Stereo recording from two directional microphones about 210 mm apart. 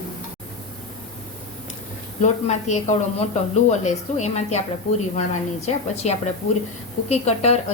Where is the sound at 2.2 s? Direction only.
35° left (ahead or behind).